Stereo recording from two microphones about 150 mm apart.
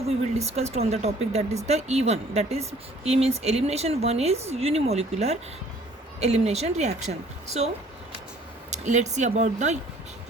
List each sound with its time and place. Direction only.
0.3 s speech: 45° right (ahead or behind)
8.7 s speech: 50° right (ahead or behind)